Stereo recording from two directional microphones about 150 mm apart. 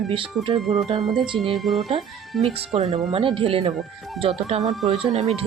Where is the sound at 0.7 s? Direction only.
40° right (ahead or behind).